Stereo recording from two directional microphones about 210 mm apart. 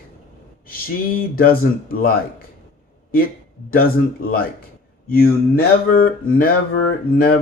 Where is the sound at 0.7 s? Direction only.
45° left (ahead or behind).